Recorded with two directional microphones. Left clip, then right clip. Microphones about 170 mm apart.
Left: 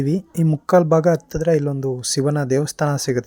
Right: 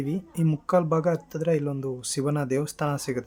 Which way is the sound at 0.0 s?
35° left (ahead or behind).